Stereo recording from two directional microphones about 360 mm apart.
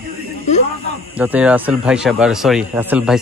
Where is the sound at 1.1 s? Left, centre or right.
Centre.